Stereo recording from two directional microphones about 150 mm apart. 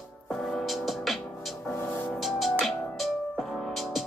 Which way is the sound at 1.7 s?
15° left (ahead or behind).